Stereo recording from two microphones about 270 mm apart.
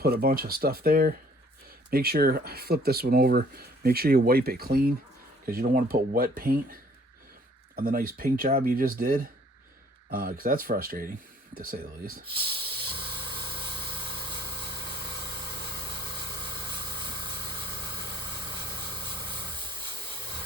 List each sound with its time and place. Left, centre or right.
0.0 s speech: right
7.8 s speech: right
12.2 s speech: centre